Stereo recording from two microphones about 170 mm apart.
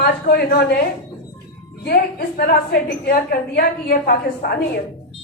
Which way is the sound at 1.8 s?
65° left (ahead or behind).